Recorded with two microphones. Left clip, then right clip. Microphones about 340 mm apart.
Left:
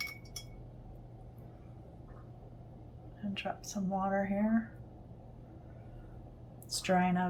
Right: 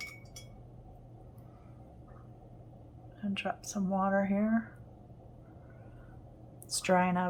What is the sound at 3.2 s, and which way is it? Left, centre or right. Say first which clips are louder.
Speech: right 3 dB; centre.